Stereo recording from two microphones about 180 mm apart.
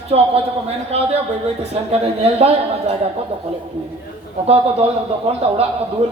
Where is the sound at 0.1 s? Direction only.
35° right (ahead or behind).